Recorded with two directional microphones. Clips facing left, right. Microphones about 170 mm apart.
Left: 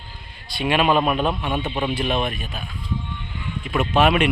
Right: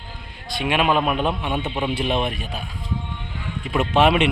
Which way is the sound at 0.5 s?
10° right (ahead or behind).